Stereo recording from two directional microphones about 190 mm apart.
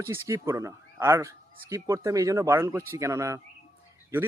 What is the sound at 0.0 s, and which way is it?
Speech, 15° right (ahead or behind).